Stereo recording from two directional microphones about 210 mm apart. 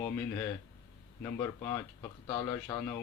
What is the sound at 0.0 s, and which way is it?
Speech, 10° left (ahead or behind).